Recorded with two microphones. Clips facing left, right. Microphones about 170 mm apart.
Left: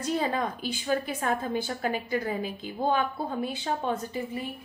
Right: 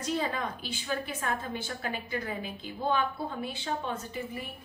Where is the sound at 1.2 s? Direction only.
40° left (ahead or behind).